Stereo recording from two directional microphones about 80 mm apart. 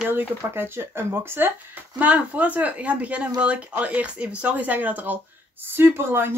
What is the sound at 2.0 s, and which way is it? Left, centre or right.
Speech, centre.